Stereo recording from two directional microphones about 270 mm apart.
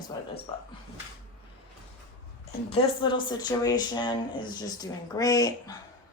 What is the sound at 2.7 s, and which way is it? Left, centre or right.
Speech, centre.